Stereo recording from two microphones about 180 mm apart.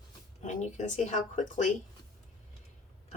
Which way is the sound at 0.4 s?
40° left (ahead or behind).